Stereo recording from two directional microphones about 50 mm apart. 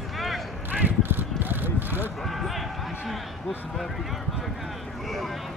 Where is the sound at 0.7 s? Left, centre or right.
Right.